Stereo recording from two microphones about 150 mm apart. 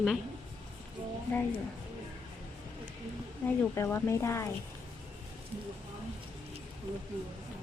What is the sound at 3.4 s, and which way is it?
Speech, 15° left (ahead or behind).